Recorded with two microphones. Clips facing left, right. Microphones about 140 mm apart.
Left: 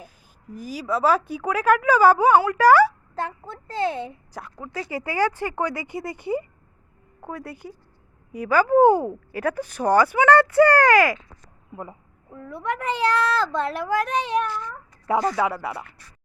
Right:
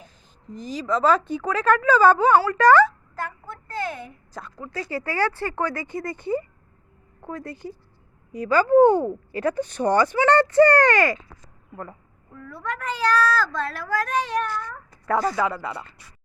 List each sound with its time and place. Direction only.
0.0 s a woman's voice: 10° left (ahead or behind)
3.2 s a woman's voice: 25° left (ahead or behind)
4.4 s a woman's voice: 10° left (ahead or behind)
11.7 s a child's voice: 15° left (ahead or behind)